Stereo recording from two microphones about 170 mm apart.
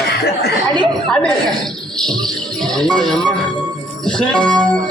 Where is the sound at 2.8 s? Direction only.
5° left (ahead or behind).